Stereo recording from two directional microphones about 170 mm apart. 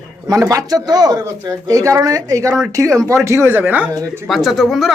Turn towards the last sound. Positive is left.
turn(degrees=0)  # may be behind; listen again after turning